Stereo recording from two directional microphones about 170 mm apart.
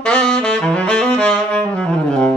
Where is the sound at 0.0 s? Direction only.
5° left (ahead or behind).